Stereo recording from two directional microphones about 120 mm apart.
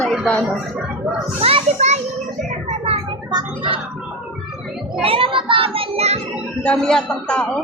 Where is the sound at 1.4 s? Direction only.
55° right (ahead or behind).